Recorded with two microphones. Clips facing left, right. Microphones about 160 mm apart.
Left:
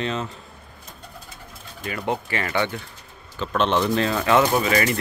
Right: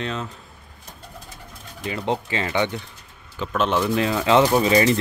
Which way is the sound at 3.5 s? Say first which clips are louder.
Even; 5° right (ahead or behind).